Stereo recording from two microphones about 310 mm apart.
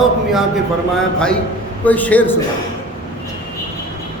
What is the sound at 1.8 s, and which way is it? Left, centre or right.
Speech, centre.